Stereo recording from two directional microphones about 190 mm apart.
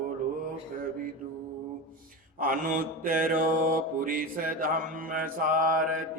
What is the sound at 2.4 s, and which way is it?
Mantra, 50° right (ahead or behind).